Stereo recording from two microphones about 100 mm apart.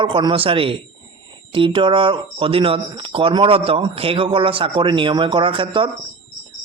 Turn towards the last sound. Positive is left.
turn(degrees=-60)  # may be behind; listen again after turning